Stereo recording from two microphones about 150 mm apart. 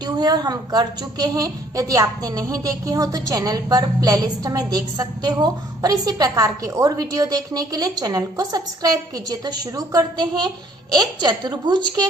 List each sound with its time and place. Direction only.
0.0 s a woman's voice: 25° right (ahead or behind)